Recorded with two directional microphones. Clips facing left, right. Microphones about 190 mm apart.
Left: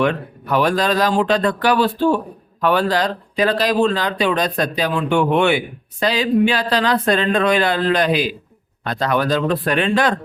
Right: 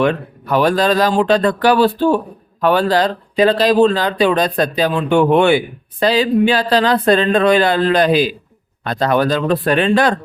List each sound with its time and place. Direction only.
0.0 s speech: 35° right (ahead or behind)
3.8 s speech: 35° right (ahead or behind)